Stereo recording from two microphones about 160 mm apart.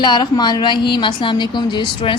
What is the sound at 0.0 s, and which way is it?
A woman's voice, 25° left (ahead or behind).